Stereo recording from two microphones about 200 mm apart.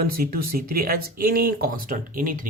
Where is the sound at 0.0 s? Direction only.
50° right (ahead or behind).